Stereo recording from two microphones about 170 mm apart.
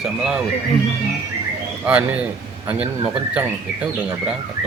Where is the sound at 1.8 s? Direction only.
5° right (ahead or behind).